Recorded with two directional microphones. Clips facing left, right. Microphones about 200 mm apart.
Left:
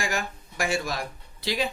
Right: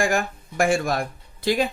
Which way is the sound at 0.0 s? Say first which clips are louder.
Right 8 dB; 50° right (ahead or behind).